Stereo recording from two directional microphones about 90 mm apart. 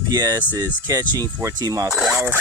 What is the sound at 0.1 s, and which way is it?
Speech, 40° right (ahead or behind).